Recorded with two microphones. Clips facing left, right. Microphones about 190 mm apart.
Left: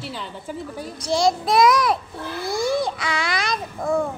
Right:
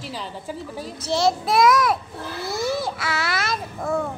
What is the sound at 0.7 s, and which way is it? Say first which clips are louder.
A child's voice: left 1 dB; 5° right (ahead or behind).